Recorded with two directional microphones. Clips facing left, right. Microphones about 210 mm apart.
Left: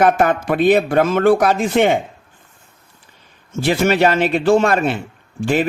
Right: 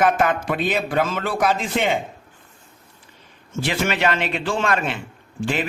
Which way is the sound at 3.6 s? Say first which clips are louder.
Left 7 dB; 40° left (ahead or behind).